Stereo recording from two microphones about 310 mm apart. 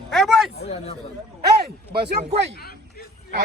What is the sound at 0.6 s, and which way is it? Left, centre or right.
Speech, centre.